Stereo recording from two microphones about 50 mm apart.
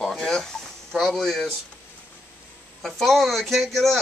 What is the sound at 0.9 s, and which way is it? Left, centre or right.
Speech, centre.